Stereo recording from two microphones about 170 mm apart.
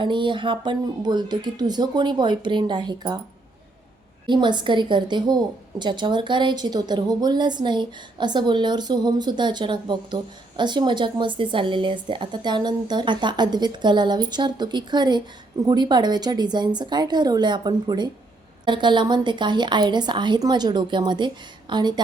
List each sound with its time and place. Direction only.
0.0 s a woman's voice: 30° right (ahead or behind)
4.3 s a woman's voice: 25° right (ahead or behind)